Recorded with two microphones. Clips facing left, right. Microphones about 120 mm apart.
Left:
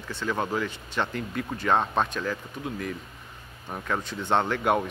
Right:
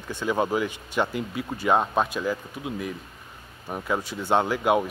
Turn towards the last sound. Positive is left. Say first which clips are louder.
# right 2 dB
turn(degrees=-5)  # may be behind; listen again after turning